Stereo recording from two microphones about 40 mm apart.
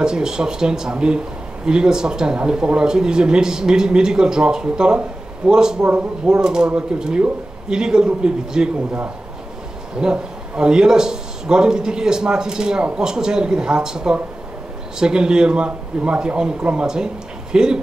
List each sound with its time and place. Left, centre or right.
0.0 s speech: centre
5.9 s speech: right
6.3 s speech: centre
9.9 s speech: right